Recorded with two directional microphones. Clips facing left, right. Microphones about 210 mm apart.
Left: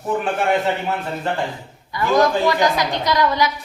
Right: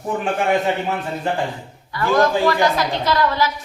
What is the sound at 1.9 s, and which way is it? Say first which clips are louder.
A woman's voice: even; 15° left (ahead or behind).